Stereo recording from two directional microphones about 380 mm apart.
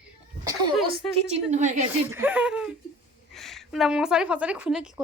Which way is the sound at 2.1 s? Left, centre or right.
Centre.